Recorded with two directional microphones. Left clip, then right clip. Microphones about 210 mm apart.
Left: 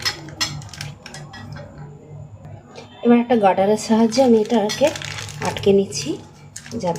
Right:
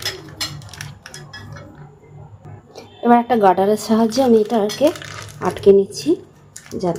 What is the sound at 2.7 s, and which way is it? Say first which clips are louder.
A woman's voice: right 3 dB; 30° right (ahead or behind).